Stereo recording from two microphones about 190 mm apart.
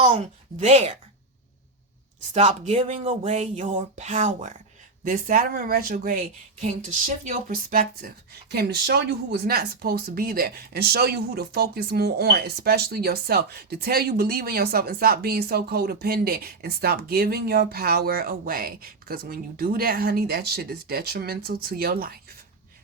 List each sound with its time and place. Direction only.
0.0 s a woman's voice: 35° right (ahead or behind)
2.3 s speech: 35° right (ahead or behind)
6.6 s speech: 35° right (ahead or behind); by 22.2 s 50° right (ahead or behind)